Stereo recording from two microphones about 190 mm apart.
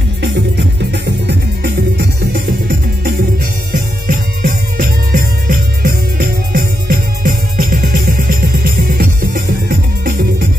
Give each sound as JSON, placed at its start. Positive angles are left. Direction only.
{"t": 0.9, "sound": "music", "side_deg": -60}